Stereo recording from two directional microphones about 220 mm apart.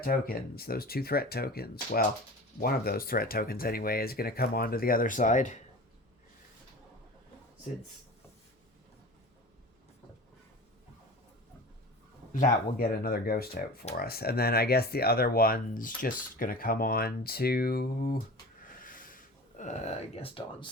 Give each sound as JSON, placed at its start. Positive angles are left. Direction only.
{"t": 0.0, "sound": "speech", "side_deg": 40}
{"t": 12.3, "sound": "speech", "side_deg": 40}
{"t": 18.8, "sound": "a sound", "side_deg": 40}